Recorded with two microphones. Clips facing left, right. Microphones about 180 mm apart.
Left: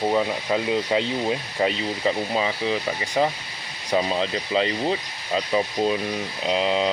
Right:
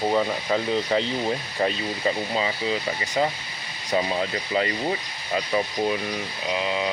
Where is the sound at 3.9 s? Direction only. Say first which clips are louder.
Left 2 dB; 20° left (ahead or behind).